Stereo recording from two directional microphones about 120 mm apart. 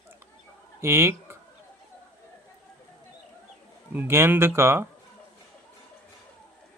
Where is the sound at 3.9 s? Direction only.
20° right (ahead or behind).